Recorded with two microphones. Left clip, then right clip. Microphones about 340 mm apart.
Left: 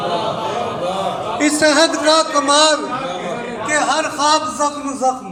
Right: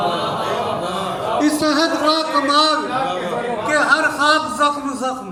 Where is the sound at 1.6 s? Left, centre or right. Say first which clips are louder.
Left 4 dB; left.